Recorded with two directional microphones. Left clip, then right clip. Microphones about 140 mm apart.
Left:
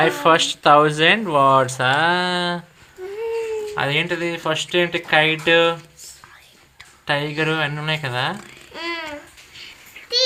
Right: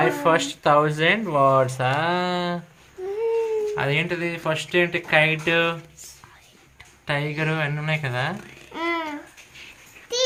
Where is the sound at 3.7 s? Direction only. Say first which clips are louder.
Left 3 dB; 35° left (ahead or behind).